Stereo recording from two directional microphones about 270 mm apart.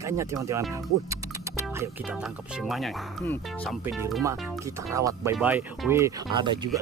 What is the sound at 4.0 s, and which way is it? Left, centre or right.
Speech, centre.